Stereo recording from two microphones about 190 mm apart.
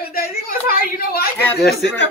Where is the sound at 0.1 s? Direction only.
50° left (ahead or behind).